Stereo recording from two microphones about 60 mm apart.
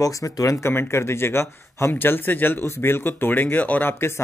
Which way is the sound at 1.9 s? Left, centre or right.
Left.